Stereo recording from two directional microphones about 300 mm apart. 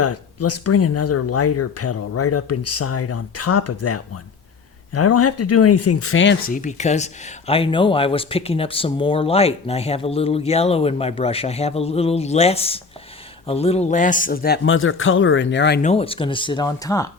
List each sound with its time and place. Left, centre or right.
0.0 s a man's voice: left
15.9 s speech: centre